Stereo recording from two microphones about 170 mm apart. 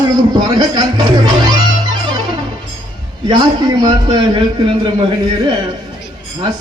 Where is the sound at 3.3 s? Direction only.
25° right (ahead or behind).